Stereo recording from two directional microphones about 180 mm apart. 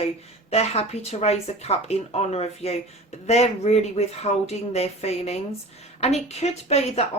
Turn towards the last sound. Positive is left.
turn(degrees=35)  # may be behind; listen again after turning